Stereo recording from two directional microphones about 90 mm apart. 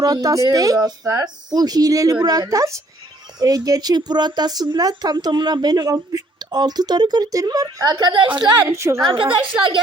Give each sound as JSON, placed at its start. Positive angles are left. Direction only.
{"t": 0.0, "sound": "a woman's voice", "side_deg": -45}
{"t": 8.6, "sound": "a woman's voice", "side_deg": -30}
{"t": 9.1, "sound": "a woman's voice", "side_deg": -70}